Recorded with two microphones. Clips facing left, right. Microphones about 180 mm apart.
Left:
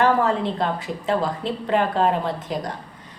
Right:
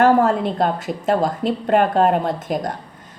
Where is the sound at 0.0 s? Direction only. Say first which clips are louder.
Right 4 dB; 50° right (ahead or behind).